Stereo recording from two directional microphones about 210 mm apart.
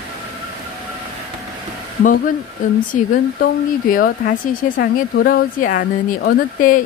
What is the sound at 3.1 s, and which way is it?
Speech, 40° left (ahead or behind).